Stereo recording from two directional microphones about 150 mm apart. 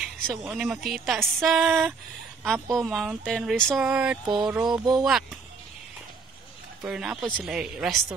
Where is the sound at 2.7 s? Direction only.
Centre (ahead or behind).